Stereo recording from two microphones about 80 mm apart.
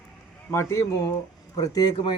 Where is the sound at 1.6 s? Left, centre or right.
Left.